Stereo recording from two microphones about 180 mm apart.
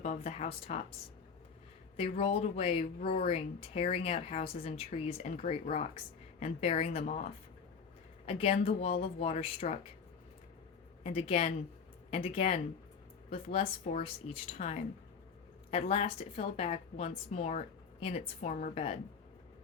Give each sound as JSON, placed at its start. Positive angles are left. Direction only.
{"t": 0.0, "sound": "speech", "side_deg": 40}
{"t": 2.0, "sound": "speech", "side_deg": 35}
{"t": 8.3, "sound": "speech", "side_deg": 35}
{"t": 11.0, "sound": "speech", "side_deg": 35}